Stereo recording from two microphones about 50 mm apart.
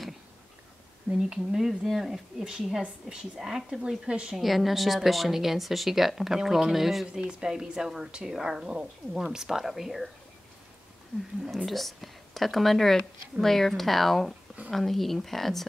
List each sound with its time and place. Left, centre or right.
1.1 s a woman's voice: centre
4.4 s speech: centre
7.1 s speech: centre
11.5 s speech: centre